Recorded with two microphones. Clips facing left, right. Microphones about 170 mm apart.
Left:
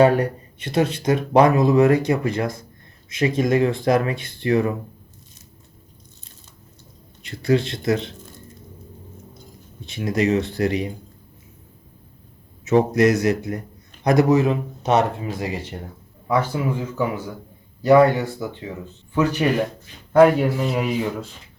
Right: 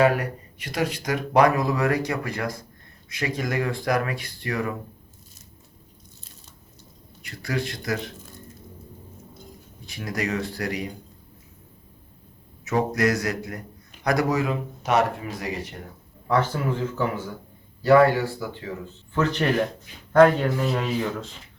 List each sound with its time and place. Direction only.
0.0 s speech: 30° left (ahead or behind)
7.2 s speech: 25° left (ahead or behind)
9.8 s speech: 25° left (ahead or behind)
12.6 s speech: 25° left (ahead or behind)
16.2 s speech: 10° left (ahead or behind)